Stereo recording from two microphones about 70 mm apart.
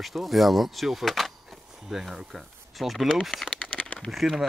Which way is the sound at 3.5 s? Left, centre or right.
Centre.